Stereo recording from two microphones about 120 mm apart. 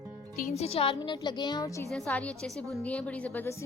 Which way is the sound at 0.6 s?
55° left (ahead or behind).